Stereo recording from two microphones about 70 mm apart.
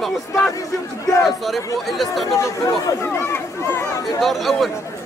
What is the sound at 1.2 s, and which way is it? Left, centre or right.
Speech, centre.